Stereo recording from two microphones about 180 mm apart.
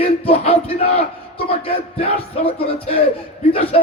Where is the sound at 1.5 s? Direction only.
35° left (ahead or behind).